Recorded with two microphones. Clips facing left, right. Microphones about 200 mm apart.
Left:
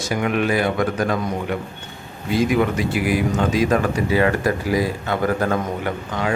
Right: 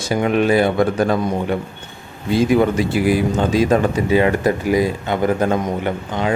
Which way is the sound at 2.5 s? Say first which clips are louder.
Right 4 dB; 30° right (ahead or behind).